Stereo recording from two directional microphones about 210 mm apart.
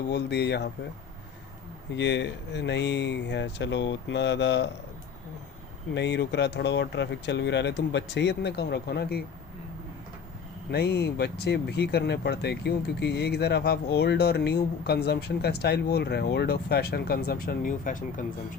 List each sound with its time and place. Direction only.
0.1 s speech: 50° left (ahead or behind)
2.0 s speech: 55° left (ahead or behind)
5.9 s speech: 55° left (ahead or behind)
10.7 s speech: 50° left (ahead or behind)